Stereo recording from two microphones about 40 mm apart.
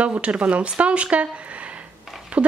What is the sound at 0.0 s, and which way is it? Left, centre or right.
Speech, right.